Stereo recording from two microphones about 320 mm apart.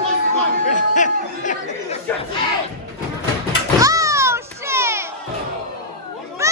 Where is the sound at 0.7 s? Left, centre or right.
Left.